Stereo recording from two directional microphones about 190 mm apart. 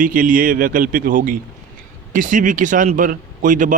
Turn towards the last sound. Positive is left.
turn(degrees=-45)  # may be behind; listen again after turning